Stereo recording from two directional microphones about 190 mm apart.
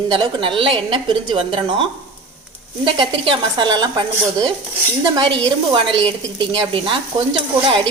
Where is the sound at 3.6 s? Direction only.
20° right (ahead or behind).